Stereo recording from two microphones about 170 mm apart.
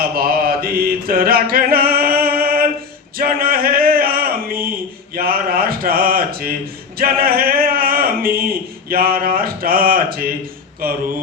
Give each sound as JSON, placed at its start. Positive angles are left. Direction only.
{"t": 0.0, "sound": "mantra", "side_deg": -60}
{"t": 3.2, "sound": "a sound", "side_deg": -60}
{"t": 5.1, "sound": "speech", "side_deg": -60}